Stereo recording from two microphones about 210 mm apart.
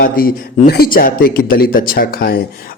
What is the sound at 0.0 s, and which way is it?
A man's voice, 45° left (ahead or behind).